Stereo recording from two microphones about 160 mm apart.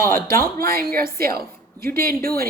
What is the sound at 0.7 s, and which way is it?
A woman's voice, 70° right (ahead or behind).